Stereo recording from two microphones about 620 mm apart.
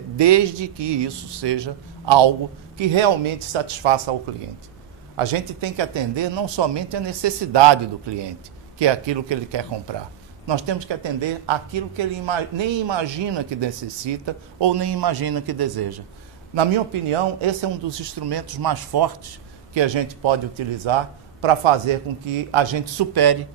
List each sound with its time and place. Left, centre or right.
0.2 s a man's voice: right
5.1 s a man's voice: right
17.1 s a man's voice: right